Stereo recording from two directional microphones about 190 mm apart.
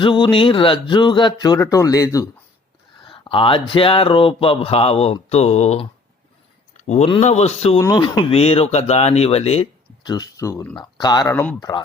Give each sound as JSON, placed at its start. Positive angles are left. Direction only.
{"t": 0.0, "sound": "speech", "side_deg": 25}
{"t": 3.0, "sound": "speech", "side_deg": 25}
{"t": 7.8, "sound": "speech", "side_deg": 20}